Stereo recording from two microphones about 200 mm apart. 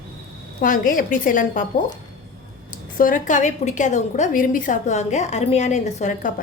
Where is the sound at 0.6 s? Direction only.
45° left (ahead or behind).